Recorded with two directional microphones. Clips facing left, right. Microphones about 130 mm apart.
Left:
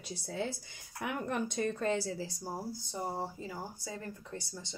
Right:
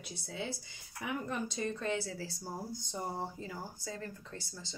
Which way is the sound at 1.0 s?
60° left (ahead or behind).